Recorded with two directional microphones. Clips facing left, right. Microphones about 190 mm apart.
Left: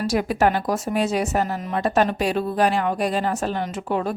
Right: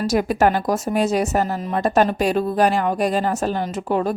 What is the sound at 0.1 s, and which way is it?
A woman's voice, 45° right (ahead or behind).